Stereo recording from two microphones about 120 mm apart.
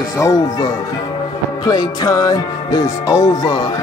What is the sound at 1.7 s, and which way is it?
Music, 35° left (ahead or behind).